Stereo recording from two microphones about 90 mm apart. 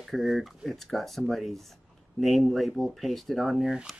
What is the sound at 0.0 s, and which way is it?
Speech, centre (ahead or behind).